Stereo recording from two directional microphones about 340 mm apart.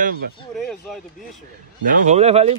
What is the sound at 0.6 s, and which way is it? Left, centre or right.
Speech, centre.